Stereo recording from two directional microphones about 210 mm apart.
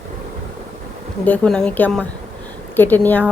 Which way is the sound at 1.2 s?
5° left (ahead or behind).